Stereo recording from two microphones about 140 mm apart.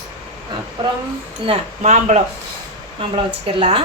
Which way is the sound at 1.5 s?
55° right (ahead or behind).